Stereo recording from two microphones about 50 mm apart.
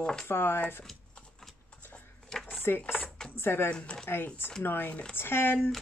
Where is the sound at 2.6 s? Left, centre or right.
Left.